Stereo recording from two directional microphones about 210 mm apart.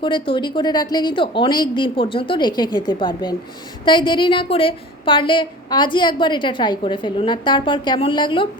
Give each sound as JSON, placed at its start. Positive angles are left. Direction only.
{"t": 0.0, "sound": "a woman's voice", "side_deg": 25}